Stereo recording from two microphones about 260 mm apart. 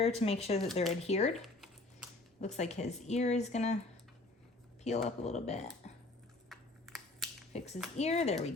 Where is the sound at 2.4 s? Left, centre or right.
Left.